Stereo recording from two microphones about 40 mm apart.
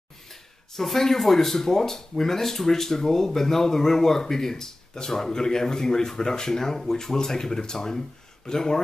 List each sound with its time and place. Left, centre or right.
0.3 s speech: centre